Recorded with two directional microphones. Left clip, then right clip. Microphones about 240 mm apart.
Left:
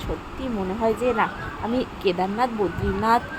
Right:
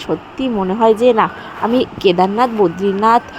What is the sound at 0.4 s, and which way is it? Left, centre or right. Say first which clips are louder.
A woman's voice: right 11 dB; right.